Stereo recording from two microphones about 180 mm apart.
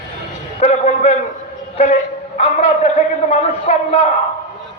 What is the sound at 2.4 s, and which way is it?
Speech, 35° left (ahead or behind).